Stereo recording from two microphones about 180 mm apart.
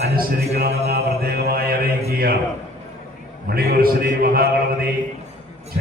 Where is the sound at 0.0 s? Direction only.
60° right (ahead or behind).